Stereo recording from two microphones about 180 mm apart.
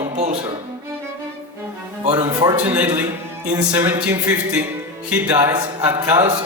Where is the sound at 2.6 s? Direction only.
10° right (ahead or behind).